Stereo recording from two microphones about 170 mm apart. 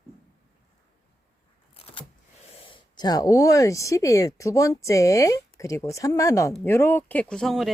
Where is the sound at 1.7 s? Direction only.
35° left (ahead or behind).